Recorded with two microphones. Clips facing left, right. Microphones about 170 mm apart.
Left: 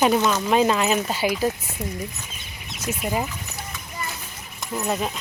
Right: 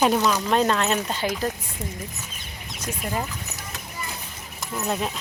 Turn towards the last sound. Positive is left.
turn(degrees=0)  # may be behind; listen again after turning